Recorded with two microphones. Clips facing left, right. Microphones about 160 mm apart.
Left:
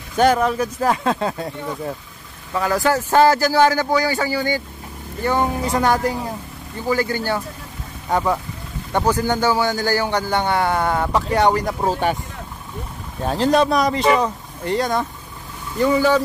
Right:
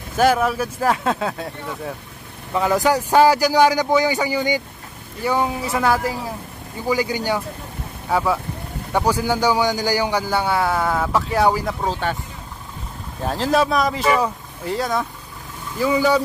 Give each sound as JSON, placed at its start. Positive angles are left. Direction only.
{"t": 0.2, "sound": "speech", "side_deg": -5}
{"t": 2.5, "sound": "a man's voice", "side_deg": -20}
{"t": 6.9, "sound": "a man's voice", "side_deg": -15}
{"t": 11.8, "sound": "speech", "side_deg": 10}
{"t": 13.2, "sound": "a man's voice", "side_deg": 0}